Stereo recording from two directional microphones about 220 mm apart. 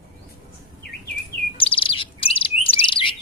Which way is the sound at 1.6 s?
25° left (ahead or behind).